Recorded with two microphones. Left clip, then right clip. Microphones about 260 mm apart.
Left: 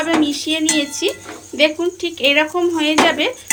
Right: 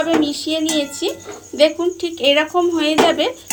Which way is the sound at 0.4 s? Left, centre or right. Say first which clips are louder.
Left 1 dB; left.